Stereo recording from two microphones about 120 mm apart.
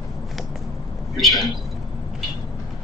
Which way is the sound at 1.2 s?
Centre (ahead or behind).